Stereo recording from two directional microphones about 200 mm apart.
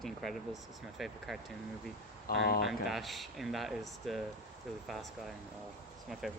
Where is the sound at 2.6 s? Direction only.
Centre (ahead or behind).